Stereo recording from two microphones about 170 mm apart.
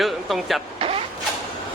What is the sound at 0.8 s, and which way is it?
Vehicle, 35° right (ahead or behind).